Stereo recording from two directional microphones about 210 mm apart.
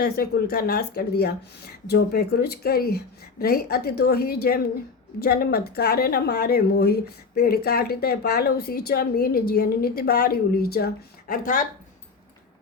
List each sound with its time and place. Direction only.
0.0 s speech: 45° left (ahead or behind)